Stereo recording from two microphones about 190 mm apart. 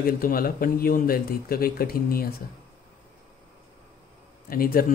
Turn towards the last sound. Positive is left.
turn(degrees=50)  # may be behind; listen again after turning